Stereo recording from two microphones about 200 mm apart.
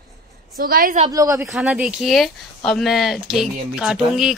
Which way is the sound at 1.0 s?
15° right (ahead or behind).